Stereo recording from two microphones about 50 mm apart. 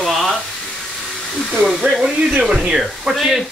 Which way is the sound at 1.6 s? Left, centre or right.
Centre.